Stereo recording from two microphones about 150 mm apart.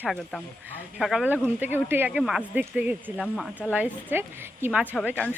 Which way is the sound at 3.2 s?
Centre (ahead or behind).